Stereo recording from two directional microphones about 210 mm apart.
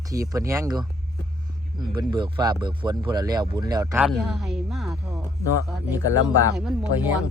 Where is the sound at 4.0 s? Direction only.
Centre (ahead or behind).